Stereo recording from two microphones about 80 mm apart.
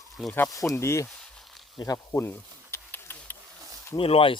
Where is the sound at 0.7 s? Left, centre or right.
Left.